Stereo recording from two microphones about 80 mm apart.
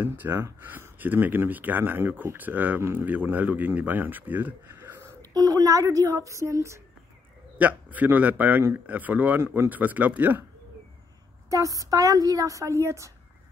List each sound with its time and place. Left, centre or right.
0.0 s speech: right
5.3 s speech: right
7.5 s speech: right
11.5 s a woman's voice: right